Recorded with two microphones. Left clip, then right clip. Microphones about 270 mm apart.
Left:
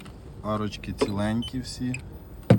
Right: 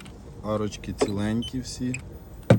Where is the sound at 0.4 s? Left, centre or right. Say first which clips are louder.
Right 1 dB; centre.